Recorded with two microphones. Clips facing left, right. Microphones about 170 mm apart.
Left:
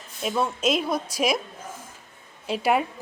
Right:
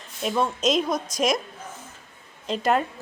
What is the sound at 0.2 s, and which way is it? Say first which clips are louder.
A woman's voice: right 1 dB; 5° left (ahead or behind).